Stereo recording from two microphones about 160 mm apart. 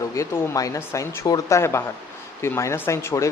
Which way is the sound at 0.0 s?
20° left (ahead or behind).